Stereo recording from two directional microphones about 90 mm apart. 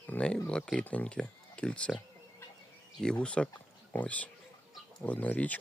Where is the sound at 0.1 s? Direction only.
10° left (ahead or behind).